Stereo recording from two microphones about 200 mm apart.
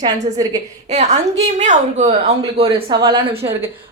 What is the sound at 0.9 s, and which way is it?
A woman's voice, 35° right (ahead or behind).